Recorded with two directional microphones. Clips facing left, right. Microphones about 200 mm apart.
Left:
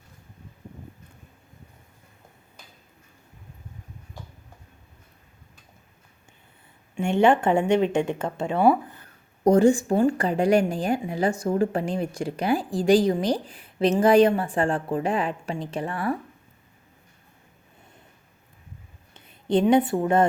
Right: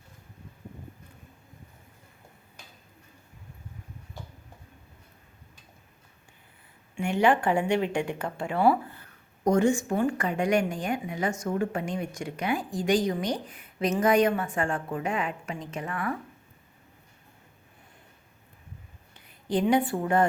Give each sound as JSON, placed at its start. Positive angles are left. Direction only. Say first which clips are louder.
{"t": 6.9, "sound": "a woman's voice", "louder": "left 4 dB", "side_deg": 25}
{"t": 9.4, "sound": "a woman's voice", "louder": "left 5 dB", "side_deg": 35}
{"t": 19.1, "sound": "speech", "louder": "left 6 dB", "side_deg": 25}